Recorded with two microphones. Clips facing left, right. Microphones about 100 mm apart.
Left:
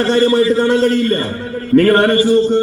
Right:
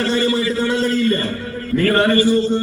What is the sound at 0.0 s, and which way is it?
A man's voice, 50° left (ahead or behind).